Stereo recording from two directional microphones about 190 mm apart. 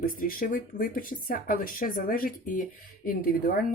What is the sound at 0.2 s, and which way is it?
Speech, 45° left (ahead or behind).